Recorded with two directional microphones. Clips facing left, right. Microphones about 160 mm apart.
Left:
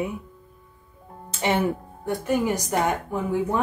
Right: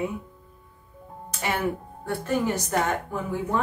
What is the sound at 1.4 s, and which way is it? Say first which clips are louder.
Speech: left 4 dB; 25° left (ahead or behind).